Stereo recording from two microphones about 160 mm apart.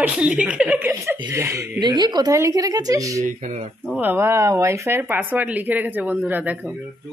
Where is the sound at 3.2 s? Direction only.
50° right (ahead or behind).